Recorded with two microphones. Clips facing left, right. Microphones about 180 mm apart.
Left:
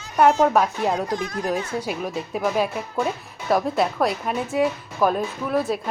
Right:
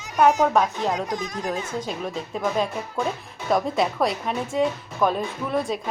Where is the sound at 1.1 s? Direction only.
15° right (ahead or behind).